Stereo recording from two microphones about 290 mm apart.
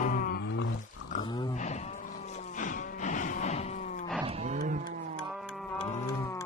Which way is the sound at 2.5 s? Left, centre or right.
Left.